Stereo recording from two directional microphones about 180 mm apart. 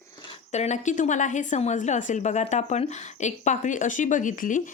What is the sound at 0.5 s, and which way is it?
A woman's voice, 40° left (ahead or behind).